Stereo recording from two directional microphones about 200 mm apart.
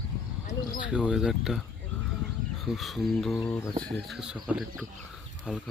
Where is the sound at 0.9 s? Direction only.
5° right (ahead or behind).